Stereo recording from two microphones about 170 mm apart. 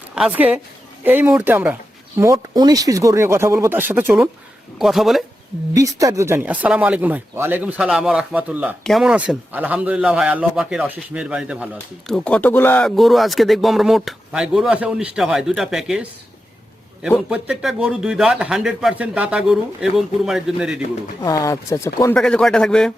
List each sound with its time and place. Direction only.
0.2 s speech: 10° right (ahead or behind)
4.8 s speech: centre (ahead or behind)
5.7 s speech: 20° right (ahead or behind); by 12.9 s 10° left (ahead or behind)
13.0 s speech: centre (ahead or behind)
17.2 s speech: 5° right (ahead or behind)
21.2 s speech: 20° left (ahead or behind)
22.1 s speech: 5° left (ahead or behind)